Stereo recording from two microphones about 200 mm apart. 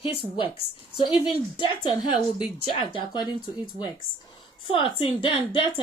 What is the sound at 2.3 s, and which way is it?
Speech, 25° left (ahead or behind).